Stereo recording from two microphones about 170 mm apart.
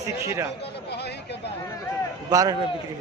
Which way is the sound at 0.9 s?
75° left (ahead or behind).